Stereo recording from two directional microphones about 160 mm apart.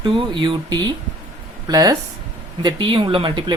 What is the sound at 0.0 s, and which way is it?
Speech, 30° right (ahead or behind).